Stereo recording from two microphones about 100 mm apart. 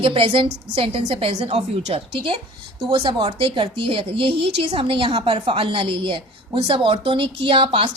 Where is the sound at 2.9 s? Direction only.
65° right (ahead or behind).